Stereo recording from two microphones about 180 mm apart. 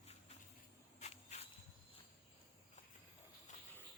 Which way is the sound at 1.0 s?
40° left (ahead or behind).